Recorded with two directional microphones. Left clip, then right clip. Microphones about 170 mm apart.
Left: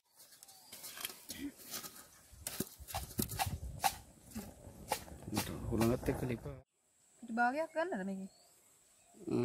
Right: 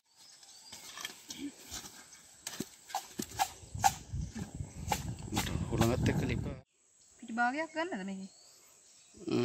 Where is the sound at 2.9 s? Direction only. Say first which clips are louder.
Right 5 dB; 25° left (ahead or behind).